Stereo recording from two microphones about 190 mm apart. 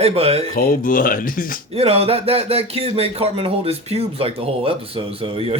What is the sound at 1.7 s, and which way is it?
Speech, 30° right (ahead or behind).